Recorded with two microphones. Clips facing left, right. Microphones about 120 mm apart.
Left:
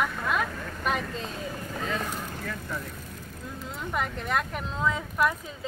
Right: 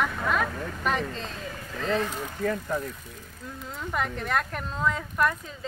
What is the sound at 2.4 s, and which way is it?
Speech, 45° right (ahead or behind).